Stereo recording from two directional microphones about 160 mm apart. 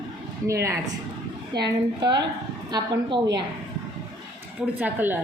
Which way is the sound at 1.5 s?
30° right (ahead or behind).